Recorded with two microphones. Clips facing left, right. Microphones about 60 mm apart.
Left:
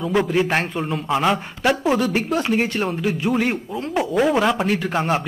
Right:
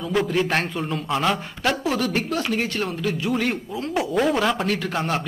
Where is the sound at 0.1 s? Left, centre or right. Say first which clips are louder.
Left 2 dB; centre.